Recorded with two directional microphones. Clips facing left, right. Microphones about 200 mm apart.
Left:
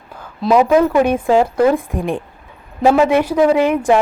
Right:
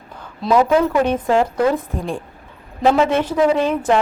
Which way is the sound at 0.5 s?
10° left (ahead or behind).